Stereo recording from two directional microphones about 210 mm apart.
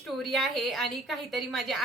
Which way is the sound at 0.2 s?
Centre (ahead or behind).